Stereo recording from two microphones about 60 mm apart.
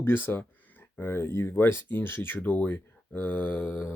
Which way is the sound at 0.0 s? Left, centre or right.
Left.